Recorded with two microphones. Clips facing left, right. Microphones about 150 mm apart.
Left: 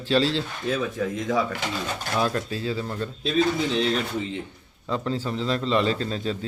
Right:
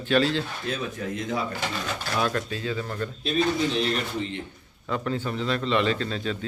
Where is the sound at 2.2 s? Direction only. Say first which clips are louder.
Left 2 dB; 30° left (ahead or behind).